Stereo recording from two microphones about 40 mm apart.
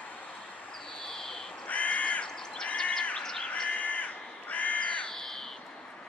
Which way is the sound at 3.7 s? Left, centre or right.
Left.